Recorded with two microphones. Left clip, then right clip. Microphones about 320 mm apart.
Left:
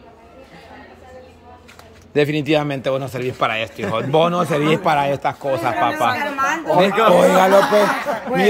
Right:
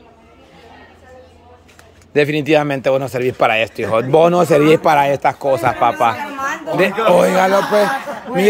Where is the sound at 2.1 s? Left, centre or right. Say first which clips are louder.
Right 3 dB; centre.